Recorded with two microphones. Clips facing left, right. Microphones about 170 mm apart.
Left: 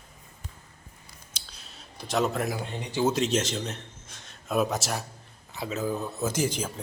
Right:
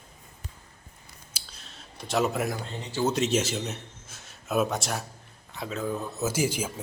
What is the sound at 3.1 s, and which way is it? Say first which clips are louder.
A man's voice: even; 5° right (ahead or behind).